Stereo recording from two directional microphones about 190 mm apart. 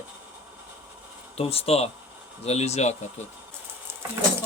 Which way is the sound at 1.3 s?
30° left (ahead or behind).